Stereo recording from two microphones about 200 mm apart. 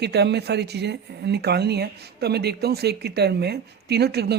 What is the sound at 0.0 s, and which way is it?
Speech, 55° right (ahead or behind).